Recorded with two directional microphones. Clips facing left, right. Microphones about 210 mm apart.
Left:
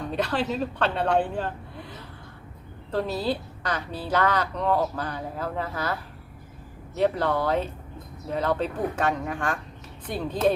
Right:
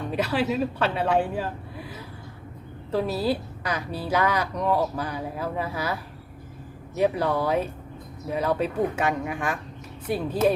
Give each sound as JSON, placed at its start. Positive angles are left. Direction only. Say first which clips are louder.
{"t": 0.1, "sound": "a woman's voice", "louder": "right 2 dB", "side_deg": -10}